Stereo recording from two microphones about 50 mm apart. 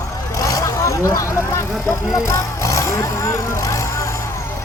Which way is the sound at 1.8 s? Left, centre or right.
Centre.